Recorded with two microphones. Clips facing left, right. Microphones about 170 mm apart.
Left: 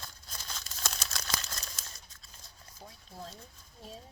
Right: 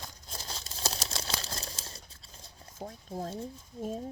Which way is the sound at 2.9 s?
50° right (ahead or behind).